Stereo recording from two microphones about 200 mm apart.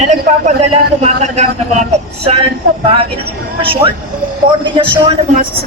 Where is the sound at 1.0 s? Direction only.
35° right (ahead or behind).